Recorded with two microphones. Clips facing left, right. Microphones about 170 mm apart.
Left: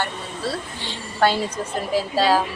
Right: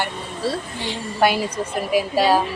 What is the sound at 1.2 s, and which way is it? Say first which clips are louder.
A woman's voice: right 1 dB; 10° right (ahead or behind).